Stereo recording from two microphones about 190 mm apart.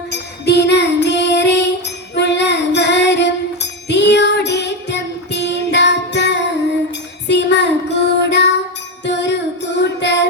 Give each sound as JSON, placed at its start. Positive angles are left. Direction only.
{"t": 0.1, "sound": "child singing", "side_deg": 60}
{"t": 2.1, "sound": "music", "side_deg": 65}
{"t": 7.3, "sound": "child singing", "side_deg": 65}
{"t": 9.0, "sound": "music", "side_deg": 65}